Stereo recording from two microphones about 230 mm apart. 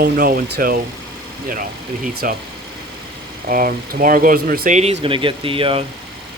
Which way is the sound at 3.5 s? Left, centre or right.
Right.